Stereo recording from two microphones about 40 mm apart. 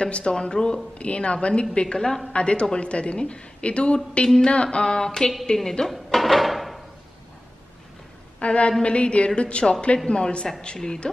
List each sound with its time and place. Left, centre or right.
0.0 s a woman's voice: left
2.0 s speech: centre
2.3 s a woman's voice: left; by 5.9 s centre
5.9 s a sound: centre
8.4 s a woman's voice: left